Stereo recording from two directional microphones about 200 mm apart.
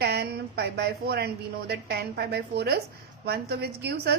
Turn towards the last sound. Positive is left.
turn(degrees=-55)  # may be behind; listen again after turning